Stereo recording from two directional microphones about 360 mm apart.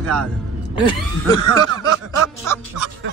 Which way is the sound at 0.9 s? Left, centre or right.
Centre.